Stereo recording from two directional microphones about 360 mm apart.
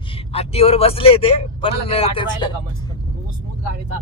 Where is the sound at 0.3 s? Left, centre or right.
Centre.